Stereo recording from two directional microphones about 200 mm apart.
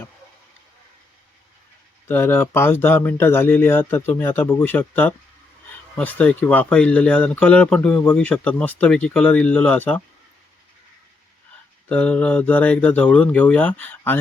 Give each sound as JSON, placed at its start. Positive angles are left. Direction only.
{"t": 2.0, "sound": "speech", "side_deg": 10}
{"t": 11.9, "sound": "speech", "side_deg": 5}